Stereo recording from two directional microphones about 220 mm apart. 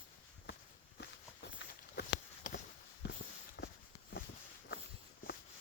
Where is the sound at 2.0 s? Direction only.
45° left (ahead or behind).